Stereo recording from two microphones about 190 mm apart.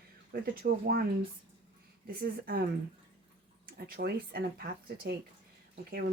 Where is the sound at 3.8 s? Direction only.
55° right (ahead or behind).